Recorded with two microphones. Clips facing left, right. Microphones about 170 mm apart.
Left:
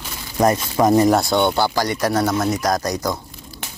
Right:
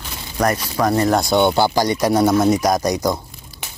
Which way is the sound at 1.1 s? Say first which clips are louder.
Even; centre (ahead or behind).